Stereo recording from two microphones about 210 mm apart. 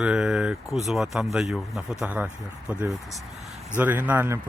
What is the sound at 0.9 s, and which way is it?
Speech, centre (ahead or behind).